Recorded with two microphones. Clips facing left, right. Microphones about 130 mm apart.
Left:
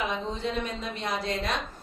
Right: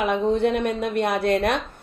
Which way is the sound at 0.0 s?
60° right (ahead or behind).